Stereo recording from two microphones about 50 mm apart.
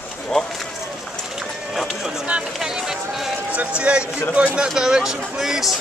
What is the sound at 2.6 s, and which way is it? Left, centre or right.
Speech, centre.